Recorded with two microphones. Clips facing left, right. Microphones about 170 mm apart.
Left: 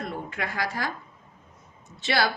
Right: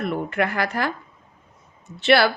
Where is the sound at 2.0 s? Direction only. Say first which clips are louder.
Right 8 dB; 65° right (ahead or behind).